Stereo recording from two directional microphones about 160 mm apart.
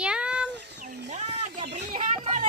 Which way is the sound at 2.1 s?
45° right (ahead or behind).